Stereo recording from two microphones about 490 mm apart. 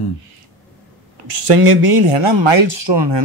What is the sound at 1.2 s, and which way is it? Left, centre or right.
Speech, right.